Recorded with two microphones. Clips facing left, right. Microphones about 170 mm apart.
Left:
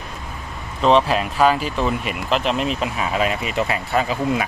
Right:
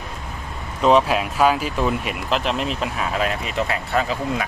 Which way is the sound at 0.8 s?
5° right (ahead or behind).